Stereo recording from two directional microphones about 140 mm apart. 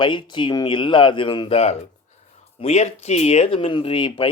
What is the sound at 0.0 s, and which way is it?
Speech, 35° left (ahead or behind).